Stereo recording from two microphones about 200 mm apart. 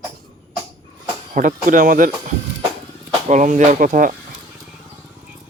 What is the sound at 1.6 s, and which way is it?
Speech, 45° right (ahead or behind).